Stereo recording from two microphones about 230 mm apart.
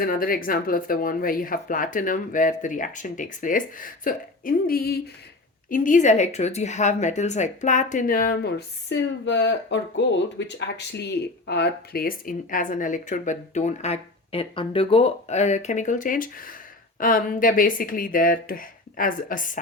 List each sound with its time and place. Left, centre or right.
0.0 s speech: left